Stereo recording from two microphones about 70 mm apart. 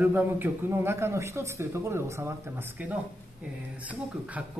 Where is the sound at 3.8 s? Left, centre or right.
Right.